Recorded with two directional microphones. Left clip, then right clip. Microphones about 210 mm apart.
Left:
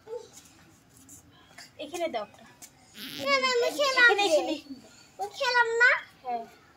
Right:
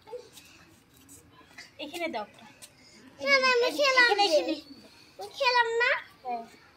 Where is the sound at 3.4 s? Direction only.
15° left (ahead or behind).